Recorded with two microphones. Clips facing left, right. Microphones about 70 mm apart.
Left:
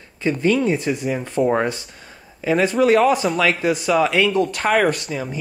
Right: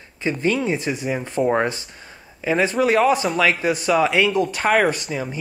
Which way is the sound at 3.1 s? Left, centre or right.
Centre.